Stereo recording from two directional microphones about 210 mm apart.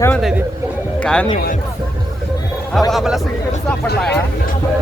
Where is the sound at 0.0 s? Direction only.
Centre (ahead or behind).